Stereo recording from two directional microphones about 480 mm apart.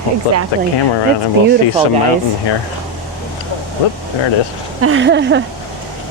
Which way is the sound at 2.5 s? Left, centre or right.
Left.